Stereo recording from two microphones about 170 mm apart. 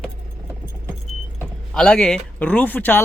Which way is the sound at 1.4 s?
5° left (ahead or behind).